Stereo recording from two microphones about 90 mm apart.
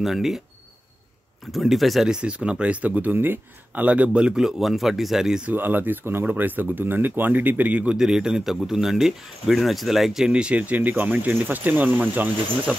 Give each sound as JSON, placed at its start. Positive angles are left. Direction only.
{"t": 0.0, "sound": "speech", "side_deg": -5}
{"t": 1.5, "sound": "speech", "side_deg": 0}
{"t": 5.5, "sound": "speech", "side_deg": -20}